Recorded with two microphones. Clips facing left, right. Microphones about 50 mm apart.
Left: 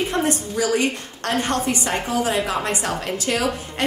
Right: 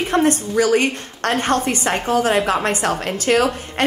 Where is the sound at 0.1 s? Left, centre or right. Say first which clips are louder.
Right 5 dB; right.